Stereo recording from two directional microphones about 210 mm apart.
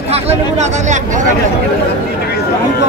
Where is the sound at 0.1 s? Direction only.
30° right (ahead or behind).